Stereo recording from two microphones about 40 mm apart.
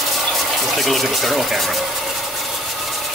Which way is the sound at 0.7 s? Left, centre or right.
Centre.